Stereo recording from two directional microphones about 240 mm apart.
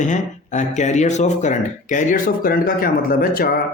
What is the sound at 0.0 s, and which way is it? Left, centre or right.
Speech, left.